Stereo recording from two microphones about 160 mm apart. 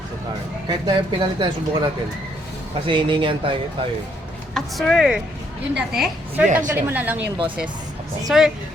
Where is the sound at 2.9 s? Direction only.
30° right (ahead or behind).